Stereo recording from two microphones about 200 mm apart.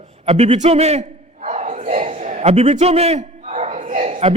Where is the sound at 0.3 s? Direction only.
35° right (ahead or behind).